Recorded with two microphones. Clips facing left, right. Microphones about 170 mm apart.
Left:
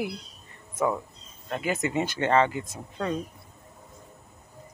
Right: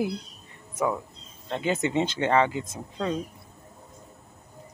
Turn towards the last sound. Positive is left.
turn(degrees=-20)  # may be behind; listen again after turning